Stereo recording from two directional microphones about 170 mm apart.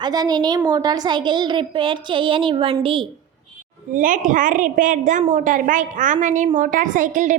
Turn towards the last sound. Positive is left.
turn(degrees=-50)  # may be behind; listen again after turning